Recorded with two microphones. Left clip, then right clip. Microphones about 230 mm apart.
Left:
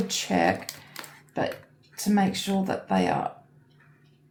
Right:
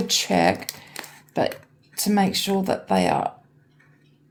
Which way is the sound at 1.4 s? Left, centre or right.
Right.